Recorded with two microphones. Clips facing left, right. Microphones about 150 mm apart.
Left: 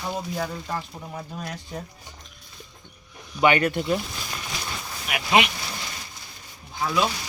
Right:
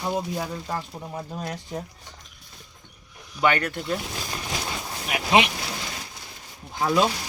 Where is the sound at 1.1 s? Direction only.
25° right (ahead or behind).